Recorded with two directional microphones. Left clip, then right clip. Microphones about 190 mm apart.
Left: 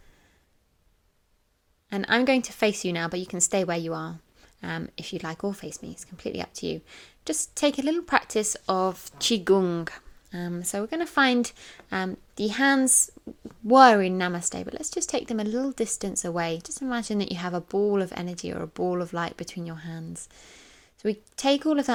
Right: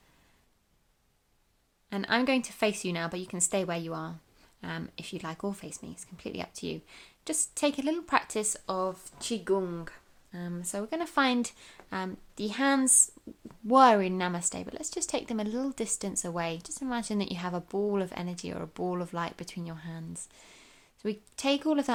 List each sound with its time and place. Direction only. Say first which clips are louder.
1.9 s a woman's voice: left 5 dB; 25° left (ahead or behind)
8.6 s speech: left 7 dB; 40° left (ahead or behind)
10.4 s a woman's voice: left 6 dB; 30° left (ahead or behind)